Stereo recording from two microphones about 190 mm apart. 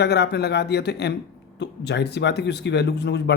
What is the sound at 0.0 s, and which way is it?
Speech, 60° left (ahead or behind).